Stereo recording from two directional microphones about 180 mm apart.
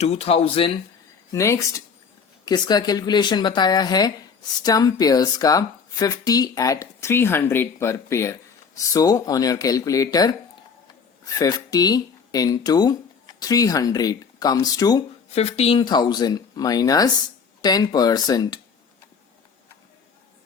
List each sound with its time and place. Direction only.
0.0 s speech: 35° left (ahead or behind)
1.3 s speech: 15° left (ahead or behind)
11.3 s speech: 20° left (ahead or behind)
15.3 s speech: 35° left (ahead or behind)